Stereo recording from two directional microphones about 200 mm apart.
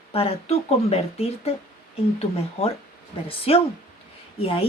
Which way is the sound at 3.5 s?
30° left (ahead or behind).